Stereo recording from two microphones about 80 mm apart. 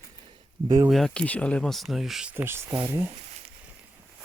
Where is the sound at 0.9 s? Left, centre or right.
Centre.